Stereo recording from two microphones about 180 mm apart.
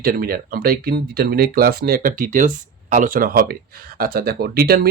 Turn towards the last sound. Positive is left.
turn(degrees=-60)  # may be behind; listen again after turning